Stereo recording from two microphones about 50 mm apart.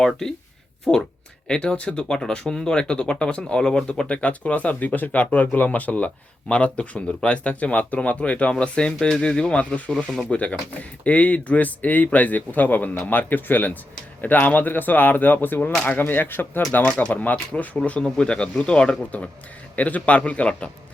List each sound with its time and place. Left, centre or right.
0.9 s speech: centre
1.5 s speech: centre
10.0 s speech: centre
10.3 s speech: left
16.9 s speech: left